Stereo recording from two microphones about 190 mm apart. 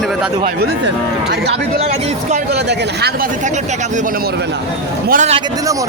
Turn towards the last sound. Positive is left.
turn(degrees=-45)  # may be behind; listen again after turning